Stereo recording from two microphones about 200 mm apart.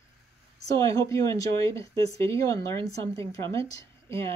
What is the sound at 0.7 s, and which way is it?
Speech, 15° left (ahead or behind).